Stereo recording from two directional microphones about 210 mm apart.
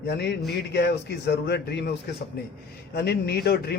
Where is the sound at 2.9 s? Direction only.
50° left (ahead or behind).